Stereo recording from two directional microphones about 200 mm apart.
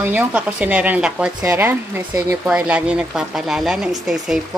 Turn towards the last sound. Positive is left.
turn(degrees=0)  # may be behind; listen again after turning